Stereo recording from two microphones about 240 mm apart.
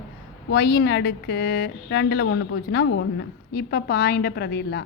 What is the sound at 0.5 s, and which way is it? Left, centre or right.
A woman's voice, left.